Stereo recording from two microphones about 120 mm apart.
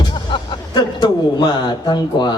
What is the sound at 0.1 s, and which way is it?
A man's voice, 40° left (ahead or behind).